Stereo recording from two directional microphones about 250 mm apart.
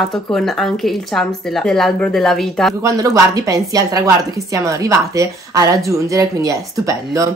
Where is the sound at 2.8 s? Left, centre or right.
Centre.